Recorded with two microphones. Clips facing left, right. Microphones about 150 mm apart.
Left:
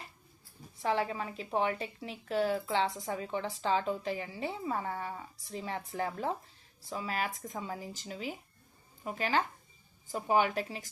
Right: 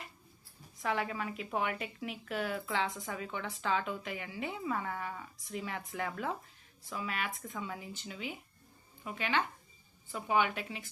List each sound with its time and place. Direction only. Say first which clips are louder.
0.8 s a woman's voice: left 3 dB; 30° left (ahead or behind)